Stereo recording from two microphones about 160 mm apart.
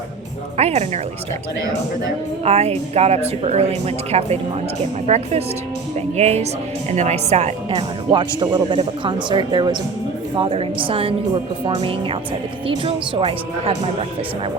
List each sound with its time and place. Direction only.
0.5 s speech: 40° right (ahead or behind)
2.4 s speech: 40° right (ahead or behind)